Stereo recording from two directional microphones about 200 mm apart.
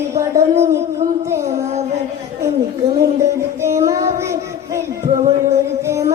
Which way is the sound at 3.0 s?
15° right (ahead or behind).